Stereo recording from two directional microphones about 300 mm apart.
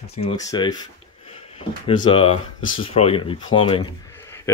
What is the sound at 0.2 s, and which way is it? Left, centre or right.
Speech, centre.